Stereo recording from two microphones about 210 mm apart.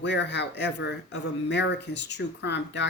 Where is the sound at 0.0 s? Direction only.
55° left (ahead or behind).